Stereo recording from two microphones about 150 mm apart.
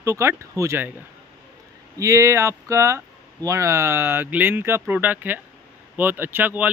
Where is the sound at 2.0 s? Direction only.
20° right (ahead or behind).